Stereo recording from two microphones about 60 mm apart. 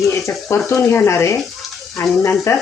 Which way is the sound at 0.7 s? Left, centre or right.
Left.